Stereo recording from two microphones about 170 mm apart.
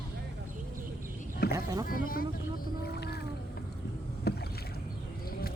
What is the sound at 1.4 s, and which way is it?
Vehicle, 65° left (ahead or behind).